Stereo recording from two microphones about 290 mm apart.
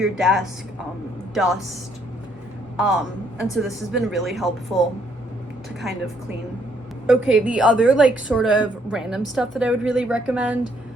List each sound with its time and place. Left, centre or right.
0.0 s a woman's voice: centre
2.7 s a man's voice: centre
5.8 s a woman's voice: centre
7.1 s a woman's voice: centre